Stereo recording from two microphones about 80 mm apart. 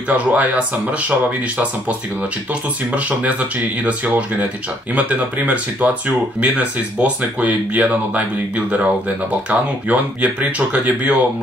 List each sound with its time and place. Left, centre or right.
0.1 s speech: centre
2.9 s speech: centre